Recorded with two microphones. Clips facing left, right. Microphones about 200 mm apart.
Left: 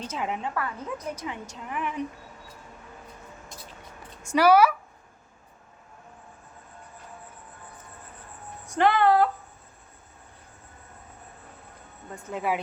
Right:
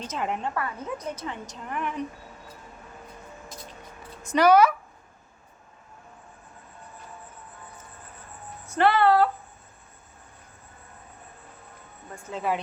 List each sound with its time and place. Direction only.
0.1 s a woman's voice: 5° left (ahead or behind)
1.1 s a woman's voice: 10° left (ahead or behind)
4.2 s a woman's voice: 10° left (ahead or behind)
8.7 s a sound: 15° left (ahead or behind)
12.1 s a woman's voice: 15° left (ahead or behind)